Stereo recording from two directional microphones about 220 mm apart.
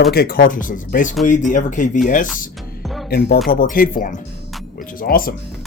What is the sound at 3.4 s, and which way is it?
Speech, 40° left (ahead or behind).